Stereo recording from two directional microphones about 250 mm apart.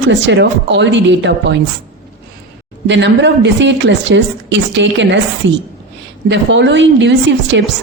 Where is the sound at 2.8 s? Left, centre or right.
Right.